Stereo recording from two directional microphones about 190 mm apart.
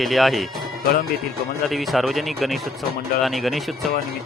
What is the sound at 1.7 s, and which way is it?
Speech, centre (ahead or behind).